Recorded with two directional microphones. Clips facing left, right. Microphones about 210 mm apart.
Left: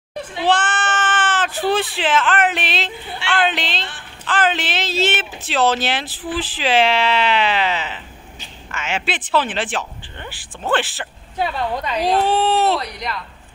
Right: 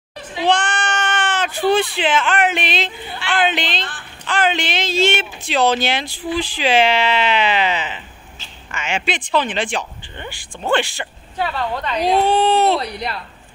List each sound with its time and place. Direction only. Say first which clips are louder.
0.5 s speech: even; 5° left (ahead or behind)
11.3 s speech: even; 15° left (ahead or behind)
12.7 s speech: right 2 dB; 30° right (ahead or behind)